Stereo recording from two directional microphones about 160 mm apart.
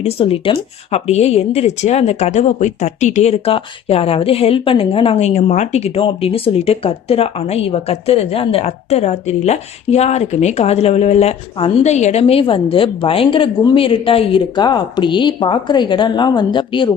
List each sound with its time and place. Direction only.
0.0 s speech: 35° left (ahead or behind)